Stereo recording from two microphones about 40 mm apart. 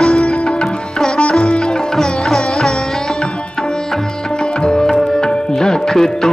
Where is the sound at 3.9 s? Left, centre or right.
Left.